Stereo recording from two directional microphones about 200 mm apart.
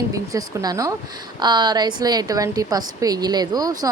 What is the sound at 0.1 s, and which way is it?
A woman's voice, 20° right (ahead or behind).